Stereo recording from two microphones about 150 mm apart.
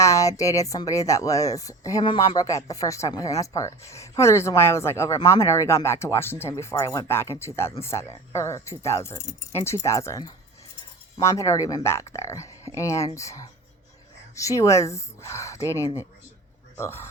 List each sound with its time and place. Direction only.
0.0 s speech: 20° left (ahead or behind)
14.3 s speech: 20° left (ahead or behind)